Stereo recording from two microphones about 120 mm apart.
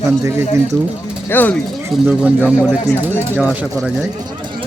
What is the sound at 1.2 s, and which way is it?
Speech, 15° left (ahead or behind).